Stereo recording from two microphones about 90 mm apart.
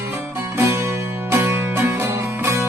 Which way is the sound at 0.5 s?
30° right (ahead or behind).